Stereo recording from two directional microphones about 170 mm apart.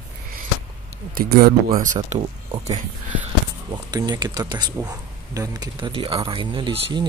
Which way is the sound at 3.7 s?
25° right (ahead or behind).